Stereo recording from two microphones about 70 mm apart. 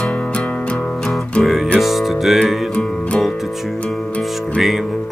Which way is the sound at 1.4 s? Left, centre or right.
Centre.